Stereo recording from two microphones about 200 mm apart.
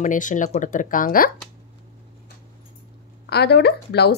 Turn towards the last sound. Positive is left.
turn(degrees=55)  # may be behind; listen again after turning